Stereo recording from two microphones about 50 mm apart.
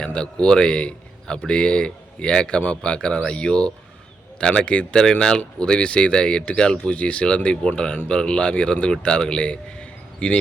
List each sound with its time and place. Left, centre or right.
0.0 s a man's voice: centre